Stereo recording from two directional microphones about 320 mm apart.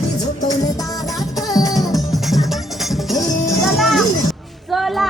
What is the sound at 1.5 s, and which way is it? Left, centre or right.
Music, centre.